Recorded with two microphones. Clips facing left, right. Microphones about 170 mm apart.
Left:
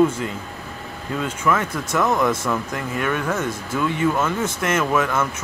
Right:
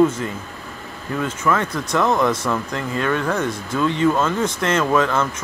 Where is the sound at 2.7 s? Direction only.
15° left (ahead or behind).